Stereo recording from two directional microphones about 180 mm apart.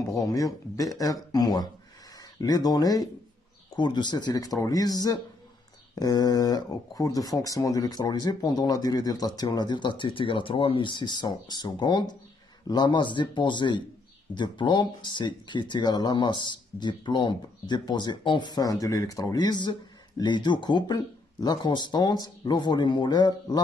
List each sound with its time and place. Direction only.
0.0 s speech: 20° left (ahead or behind)